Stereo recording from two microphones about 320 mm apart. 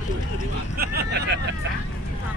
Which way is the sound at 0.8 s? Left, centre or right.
Right.